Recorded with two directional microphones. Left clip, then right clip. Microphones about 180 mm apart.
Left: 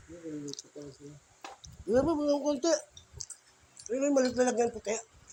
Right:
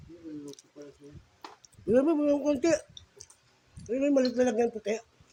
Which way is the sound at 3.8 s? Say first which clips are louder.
Right 2 dB; 50° right (ahead or behind).